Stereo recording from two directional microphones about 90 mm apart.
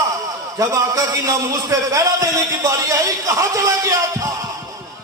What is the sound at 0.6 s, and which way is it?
A man's voice, 40° right (ahead or behind).